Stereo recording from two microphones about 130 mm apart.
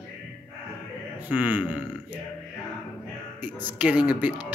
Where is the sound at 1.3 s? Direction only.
10° right (ahead or behind).